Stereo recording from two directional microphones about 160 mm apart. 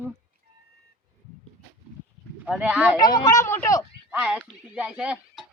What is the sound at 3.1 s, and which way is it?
Speech, 25° left (ahead or behind).